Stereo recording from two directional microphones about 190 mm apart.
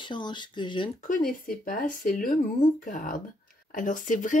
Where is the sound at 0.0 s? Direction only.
25° left (ahead or behind).